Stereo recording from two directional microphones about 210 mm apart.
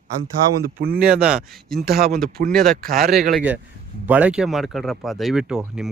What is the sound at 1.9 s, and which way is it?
Speech, 45° right (ahead or behind).